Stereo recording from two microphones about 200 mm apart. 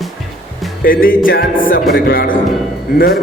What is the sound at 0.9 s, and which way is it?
A man's voice, 45° left (ahead or behind).